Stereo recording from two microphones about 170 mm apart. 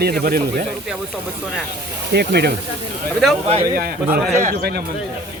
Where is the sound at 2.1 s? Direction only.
75° right (ahead or behind).